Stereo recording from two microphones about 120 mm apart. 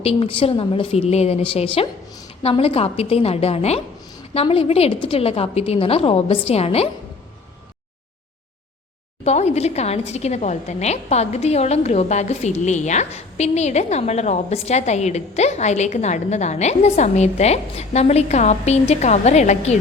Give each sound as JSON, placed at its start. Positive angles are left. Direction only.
{"t": 0.0, "sound": "a woman's voice", "side_deg": 55}
{"t": 9.2, "sound": "a woman's voice", "side_deg": 65}